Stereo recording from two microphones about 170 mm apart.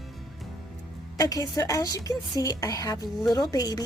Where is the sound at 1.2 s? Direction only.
20° left (ahead or behind).